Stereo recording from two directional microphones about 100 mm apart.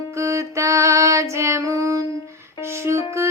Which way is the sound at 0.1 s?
30° right (ahead or behind).